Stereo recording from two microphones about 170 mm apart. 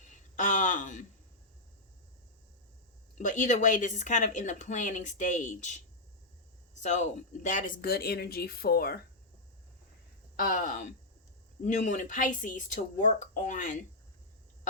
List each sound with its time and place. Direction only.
0.0 s a sound: 45° left (ahead or behind)
3.2 s speech: 50° left (ahead or behind)
6.8 s speech: 45° left (ahead or behind); by 9.0 s 65° left (ahead or behind)
10.3 s speech: 55° left (ahead or behind)